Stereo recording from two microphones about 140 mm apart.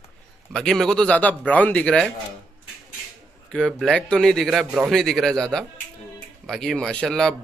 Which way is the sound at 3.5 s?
5° left (ahead or behind).